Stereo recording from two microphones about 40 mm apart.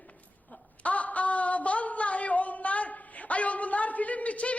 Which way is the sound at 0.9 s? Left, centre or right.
Left.